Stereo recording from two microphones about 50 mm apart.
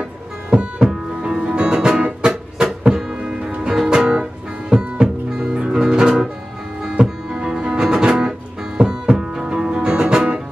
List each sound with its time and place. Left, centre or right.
0.5 s music: centre